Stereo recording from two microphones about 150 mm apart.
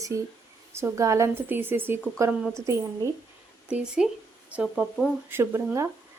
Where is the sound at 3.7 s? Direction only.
5° right (ahead or behind).